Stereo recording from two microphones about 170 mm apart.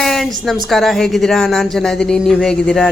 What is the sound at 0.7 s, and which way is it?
Speech, centre (ahead or behind).